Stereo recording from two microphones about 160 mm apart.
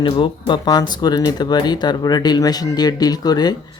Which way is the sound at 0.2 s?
30° left (ahead or behind).